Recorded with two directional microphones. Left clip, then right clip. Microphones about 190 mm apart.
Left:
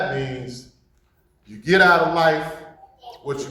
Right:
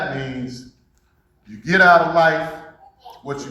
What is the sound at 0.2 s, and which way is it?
A man's voice, 40° left (ahead or behind).